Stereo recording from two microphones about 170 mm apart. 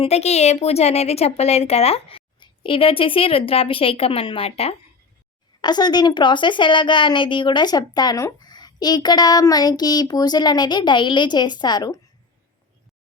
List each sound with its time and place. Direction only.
0.0 s a woman's voice: 40° left (ahead or behind)
5.6 s speech: 25° left (ahead or behind)